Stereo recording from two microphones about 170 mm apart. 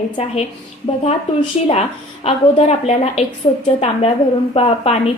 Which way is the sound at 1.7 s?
35° left (ahead or behind).